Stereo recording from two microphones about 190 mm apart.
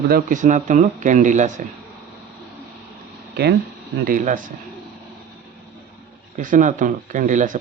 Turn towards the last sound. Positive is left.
turn(degrees=-40)  # may be behind; listen again after turning